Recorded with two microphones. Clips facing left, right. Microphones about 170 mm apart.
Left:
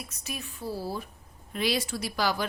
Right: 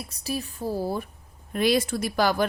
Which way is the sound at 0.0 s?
35° right (ahead or behind).